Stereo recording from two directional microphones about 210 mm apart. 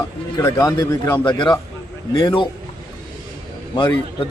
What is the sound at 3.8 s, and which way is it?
Speech, 20° left (ahead or behind).